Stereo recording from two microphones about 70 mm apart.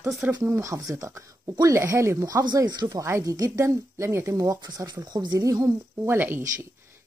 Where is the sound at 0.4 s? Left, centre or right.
Right.